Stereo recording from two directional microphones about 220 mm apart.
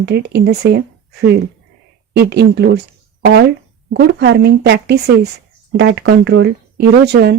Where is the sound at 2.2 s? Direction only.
50° right (ahead or behind).